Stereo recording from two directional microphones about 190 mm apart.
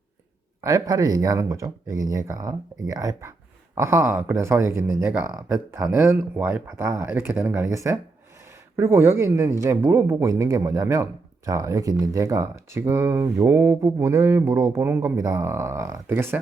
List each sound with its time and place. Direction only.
0.6 s speech: 15° right (ahead or behind)